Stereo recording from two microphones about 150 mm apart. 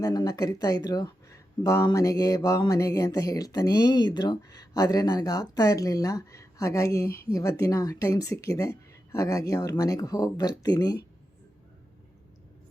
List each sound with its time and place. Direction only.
0.0 s speech: 25° left (ahead or behind)